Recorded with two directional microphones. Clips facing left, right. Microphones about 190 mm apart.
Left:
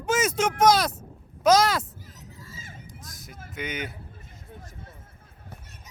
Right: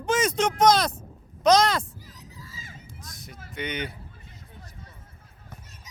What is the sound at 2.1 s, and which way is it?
Crowd, 50° left (ahead or behind).